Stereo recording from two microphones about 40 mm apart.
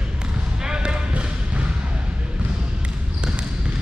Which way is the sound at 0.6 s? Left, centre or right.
Right.